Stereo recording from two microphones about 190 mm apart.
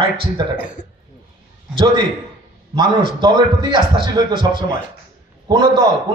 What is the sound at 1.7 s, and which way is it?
A man's voice, 25° right (ahead or behind).